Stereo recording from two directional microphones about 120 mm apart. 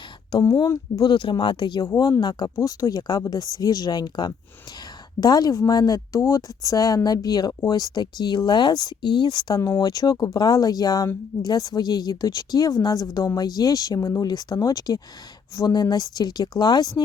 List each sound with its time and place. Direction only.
0.4 s speech: 25° left (ahead or behind)
1.9 s speech: 30° left (ahead or behind)
9.6 s speech: 25° left (ahead or behind)